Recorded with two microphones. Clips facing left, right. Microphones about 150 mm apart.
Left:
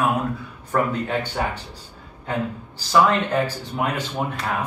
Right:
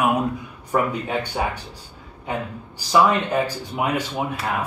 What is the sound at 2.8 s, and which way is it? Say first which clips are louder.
Speech: even; 10° right (ahead or behind).